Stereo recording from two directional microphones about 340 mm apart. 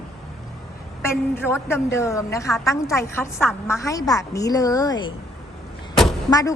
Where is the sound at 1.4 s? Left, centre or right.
Centre.